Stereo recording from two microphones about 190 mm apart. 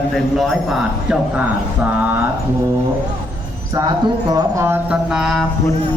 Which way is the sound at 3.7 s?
20° right (ahead or behind).